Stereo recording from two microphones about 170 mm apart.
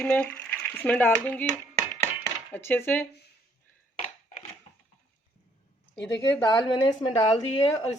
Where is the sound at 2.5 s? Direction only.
10° left (ahead or behind).